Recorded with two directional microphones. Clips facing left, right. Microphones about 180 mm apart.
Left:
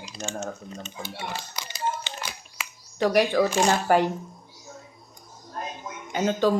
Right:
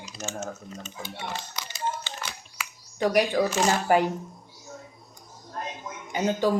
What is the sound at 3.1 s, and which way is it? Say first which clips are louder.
Speech: left 2 dB; 15° right (ahead or behind).